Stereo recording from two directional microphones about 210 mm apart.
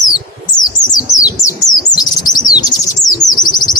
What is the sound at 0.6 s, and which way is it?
Bird, 15° left (ahead or behind).